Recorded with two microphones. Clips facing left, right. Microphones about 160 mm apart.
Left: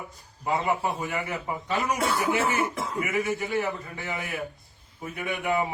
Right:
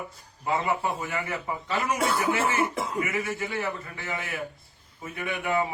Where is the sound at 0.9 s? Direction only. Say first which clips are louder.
Left 1 dB; 20° left (ahead or behind).